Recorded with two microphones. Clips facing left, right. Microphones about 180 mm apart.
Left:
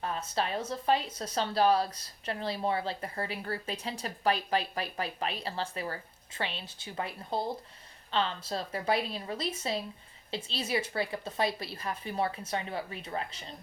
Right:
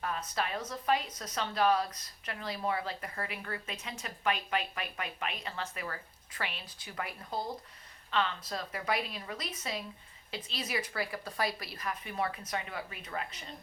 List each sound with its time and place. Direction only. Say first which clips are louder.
0.0 s a woman's voice: left 2 dB; 30° left (ahead or behind)